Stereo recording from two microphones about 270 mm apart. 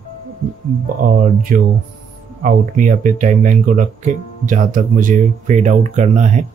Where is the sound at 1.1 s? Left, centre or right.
Right.